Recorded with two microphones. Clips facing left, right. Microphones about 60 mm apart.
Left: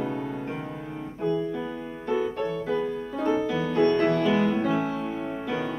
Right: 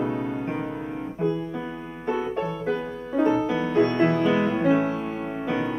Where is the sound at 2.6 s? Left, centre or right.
Right.